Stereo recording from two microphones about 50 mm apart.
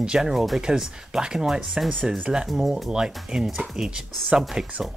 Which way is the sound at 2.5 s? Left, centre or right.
Centre.